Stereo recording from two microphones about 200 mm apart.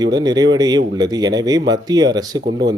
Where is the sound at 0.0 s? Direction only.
20° right (ahead or behind).